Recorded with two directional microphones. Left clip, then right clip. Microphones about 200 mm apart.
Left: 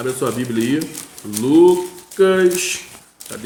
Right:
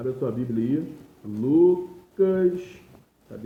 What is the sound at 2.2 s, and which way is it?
Speech, 20° left (ahead or behind).